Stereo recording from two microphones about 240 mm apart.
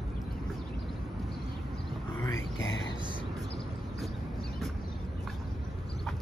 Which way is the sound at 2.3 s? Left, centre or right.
Left.